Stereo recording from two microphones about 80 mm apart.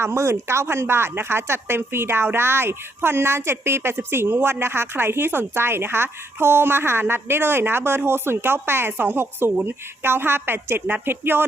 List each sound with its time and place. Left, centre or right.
0.0 s speech: right